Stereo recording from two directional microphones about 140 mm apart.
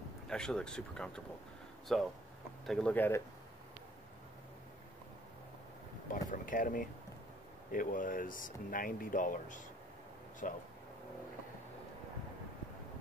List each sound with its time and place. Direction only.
0.3 s speech: 5° left (ahead or behind)
6.3 s speech: 75° left (ahead or behind)